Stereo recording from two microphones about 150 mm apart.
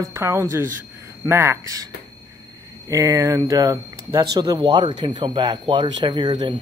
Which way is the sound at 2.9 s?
20° right (ahead or behind).